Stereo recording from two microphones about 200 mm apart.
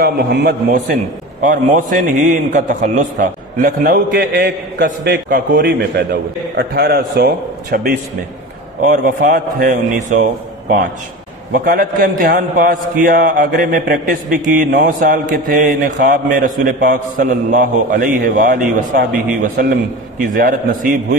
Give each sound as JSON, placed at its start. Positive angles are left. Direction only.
{"t": 0.0, "sound": "a man's voice", "side_deg": -55}
{"t": 0.7, "sound": "a man's voice", "side_deg": -40}
{"t": 11.5, "sound": "a man's voice", "side_deg": -50}